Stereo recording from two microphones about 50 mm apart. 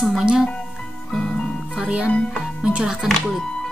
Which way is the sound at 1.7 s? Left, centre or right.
Centre.